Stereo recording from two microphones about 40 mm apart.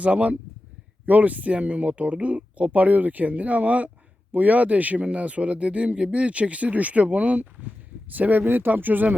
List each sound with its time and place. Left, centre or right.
0.0 s speech: right
1.0 s speech: right
8.1 s speech: right